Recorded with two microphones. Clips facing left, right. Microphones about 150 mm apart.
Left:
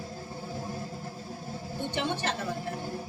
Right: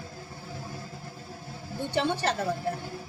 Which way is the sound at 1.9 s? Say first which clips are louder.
Right 5 dB; 35° right (ahead or behind).